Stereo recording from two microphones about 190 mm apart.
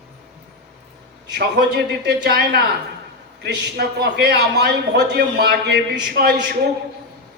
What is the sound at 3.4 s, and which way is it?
Speech, 60° right (ahead or behind).